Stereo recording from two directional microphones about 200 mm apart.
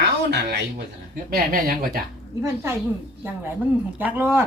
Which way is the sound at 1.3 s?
45° right (ahead or behind).